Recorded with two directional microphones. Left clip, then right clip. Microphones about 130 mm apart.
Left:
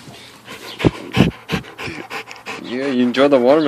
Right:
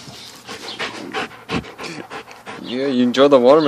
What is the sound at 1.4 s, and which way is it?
Dog, 20° right (ahead or behind).